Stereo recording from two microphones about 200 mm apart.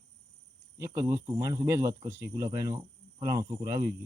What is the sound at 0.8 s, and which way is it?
Speech, 15° right (ahead or behind).